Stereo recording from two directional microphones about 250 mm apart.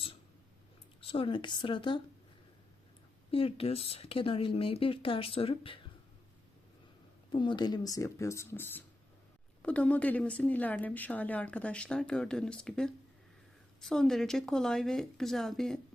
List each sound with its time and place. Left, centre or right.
1.0 s speech: left
3.3 s speech: left
7.3 s a woman's voice: centre